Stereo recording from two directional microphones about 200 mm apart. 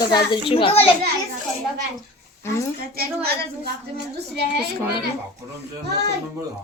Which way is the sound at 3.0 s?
50° right (ahead or behind).